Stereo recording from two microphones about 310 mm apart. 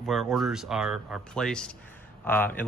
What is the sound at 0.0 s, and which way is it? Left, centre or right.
Speech, centre.